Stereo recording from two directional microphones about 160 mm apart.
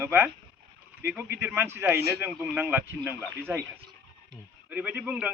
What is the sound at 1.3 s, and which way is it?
A man's voice, 15° right (ahead or behind).